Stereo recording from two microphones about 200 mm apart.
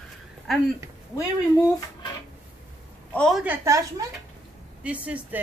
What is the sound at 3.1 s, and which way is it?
Speech, 5° left (ahead or behind).